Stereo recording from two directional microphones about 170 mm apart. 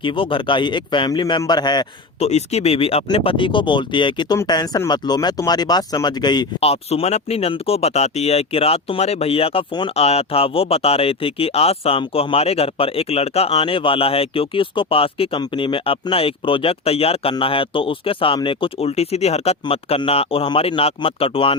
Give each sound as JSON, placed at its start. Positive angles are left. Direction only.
{"t": 0.0, "sound": "speech", "side_deg": 30}
{"t": 2.1, "sound": "speech", "side_deg": 40}
{"t": 6.6, "sound": "speech", "side_deg": 35}